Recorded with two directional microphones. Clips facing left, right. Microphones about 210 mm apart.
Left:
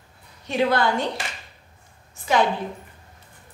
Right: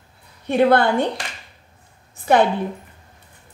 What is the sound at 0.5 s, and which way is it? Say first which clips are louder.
Speech: right 6 dB; 55° right (ahead or behind).